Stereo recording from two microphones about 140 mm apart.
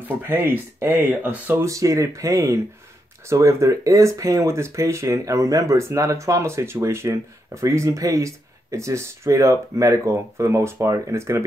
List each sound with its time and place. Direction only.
0.3 s speech: 15° right (ahead or behind)
1.7 s speech: 25° right (ahead or behind)